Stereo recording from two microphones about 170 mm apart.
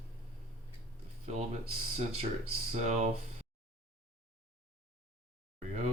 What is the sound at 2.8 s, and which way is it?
Speech, 40° right (ahead or behind).